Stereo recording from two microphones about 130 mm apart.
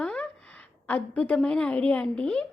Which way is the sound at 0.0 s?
10° left (ahead or behind).